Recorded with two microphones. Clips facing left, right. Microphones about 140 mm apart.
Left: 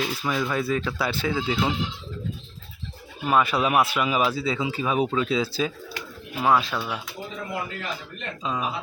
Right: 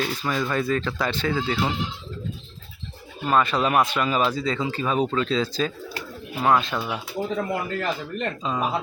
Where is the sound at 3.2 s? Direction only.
10° left (ahead or behind).